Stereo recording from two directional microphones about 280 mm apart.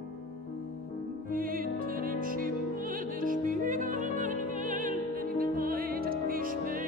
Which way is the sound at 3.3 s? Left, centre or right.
Right.